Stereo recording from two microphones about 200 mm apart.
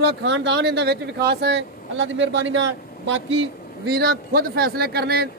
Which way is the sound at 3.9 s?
50° right (ahead or behind).